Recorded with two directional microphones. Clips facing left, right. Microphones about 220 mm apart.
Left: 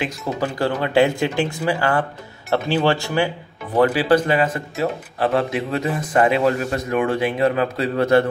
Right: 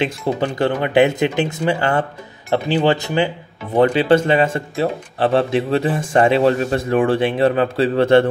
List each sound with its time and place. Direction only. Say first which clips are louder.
0.3 s speech: right 2 dB; 30° right (ahead or behind)